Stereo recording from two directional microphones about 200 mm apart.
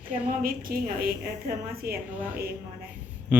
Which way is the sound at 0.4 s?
45° right (ahead or behind).